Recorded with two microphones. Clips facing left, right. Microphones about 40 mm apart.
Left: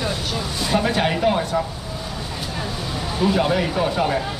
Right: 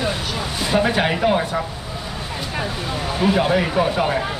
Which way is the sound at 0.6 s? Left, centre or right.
Centre.